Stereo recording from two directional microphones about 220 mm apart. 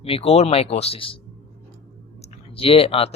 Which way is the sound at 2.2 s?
25° left (ahead or behind).